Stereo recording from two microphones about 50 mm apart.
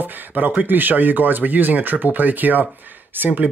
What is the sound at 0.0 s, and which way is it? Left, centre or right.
Speech, right.